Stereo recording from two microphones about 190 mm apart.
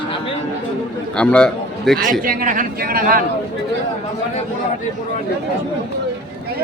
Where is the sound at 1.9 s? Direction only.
45° right (ahead or behind).